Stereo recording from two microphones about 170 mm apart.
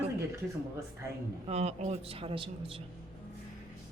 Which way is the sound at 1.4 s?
40° right (ahead or behind).